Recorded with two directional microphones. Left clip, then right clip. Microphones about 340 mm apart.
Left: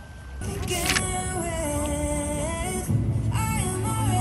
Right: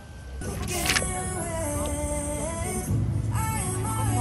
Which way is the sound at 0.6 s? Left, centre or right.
Centre.